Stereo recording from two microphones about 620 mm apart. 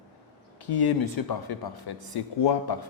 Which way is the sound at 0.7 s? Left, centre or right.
Left.